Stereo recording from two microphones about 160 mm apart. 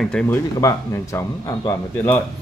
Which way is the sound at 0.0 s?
5° left (ahead or behind).